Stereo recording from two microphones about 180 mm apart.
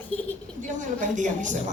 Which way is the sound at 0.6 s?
45° right (ahead or behind).